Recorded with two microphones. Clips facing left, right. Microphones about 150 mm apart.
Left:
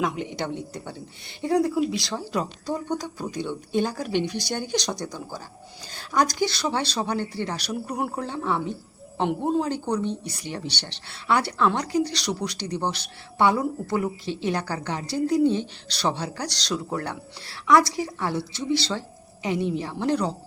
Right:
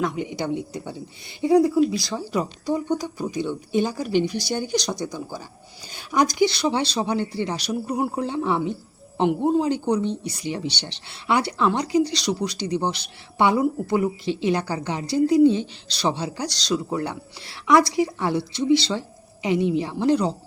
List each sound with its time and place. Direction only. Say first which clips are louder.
0.0 s speech: right 2 dB; centre (ahead or behind)
7.7 s speech: right 4 dB; 5° right (ahead or behind)
8.2 s speech: right 4 dB; 15° right (ahead or behind)
15.4 s speech: right 4 dB; 55° left (ahead or behind)
16.0 s speech: right 2 dB; 15° right (ahead or behind)